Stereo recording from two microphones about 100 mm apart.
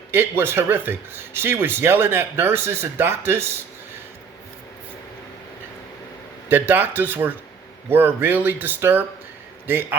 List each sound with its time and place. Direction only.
0.1 s speech: 25° right (ahead or behind)
6.5 s speech: 20° right (ahead or behind)